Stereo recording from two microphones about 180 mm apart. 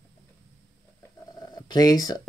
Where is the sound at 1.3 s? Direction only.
25° left (ahead or behind).